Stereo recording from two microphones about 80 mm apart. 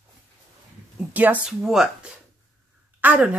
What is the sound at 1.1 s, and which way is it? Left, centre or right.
Speech, centre.